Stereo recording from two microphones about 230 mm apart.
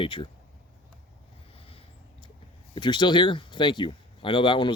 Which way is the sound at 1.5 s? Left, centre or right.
Left.